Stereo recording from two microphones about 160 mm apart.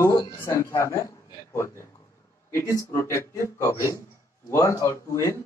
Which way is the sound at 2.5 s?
20° left (ahead or behind).